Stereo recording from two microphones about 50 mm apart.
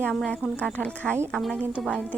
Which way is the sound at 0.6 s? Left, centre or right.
Left.